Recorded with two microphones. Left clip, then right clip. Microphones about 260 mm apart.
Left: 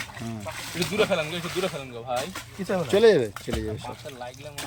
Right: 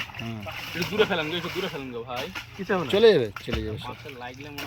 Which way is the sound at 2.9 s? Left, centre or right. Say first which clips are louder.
Even; centre.